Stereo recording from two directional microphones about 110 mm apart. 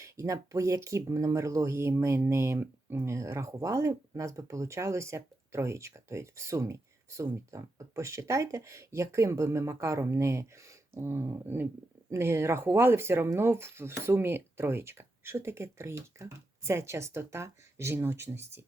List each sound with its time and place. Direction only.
0.0 s speech: 30° right (ahead or behind)